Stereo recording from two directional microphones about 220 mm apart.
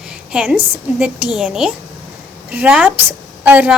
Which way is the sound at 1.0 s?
5° right (ahead or behind).